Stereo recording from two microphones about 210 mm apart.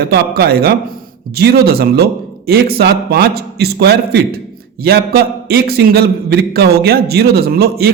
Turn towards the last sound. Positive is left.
turn(degrees=-50)  # may be behind; listen again after turning